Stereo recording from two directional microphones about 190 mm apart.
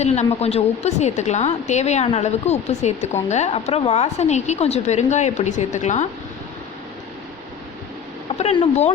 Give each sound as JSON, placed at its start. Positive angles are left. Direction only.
{"t": 0.0, "sound": "a woman's voice", "side_deg": 35}
{"t": 8.4, "sound": "a woman's voice", "side_deg": 35}